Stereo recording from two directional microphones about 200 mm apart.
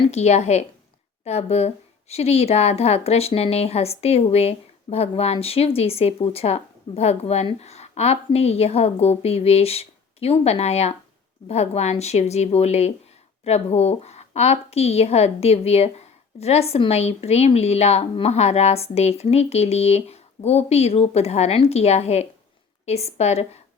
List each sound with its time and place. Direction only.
0.0 s a woman's voice: 35° left (ahead or behind)